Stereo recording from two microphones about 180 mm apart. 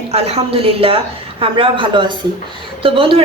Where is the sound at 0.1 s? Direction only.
35° right (ahead or behind).